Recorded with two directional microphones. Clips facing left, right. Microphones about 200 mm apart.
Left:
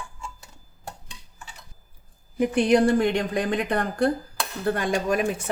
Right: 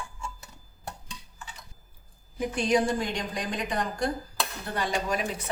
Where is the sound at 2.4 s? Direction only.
60° left (ahead or behind).